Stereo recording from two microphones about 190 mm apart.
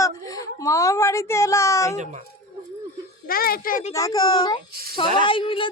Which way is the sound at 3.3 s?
50° left (ahead or behind).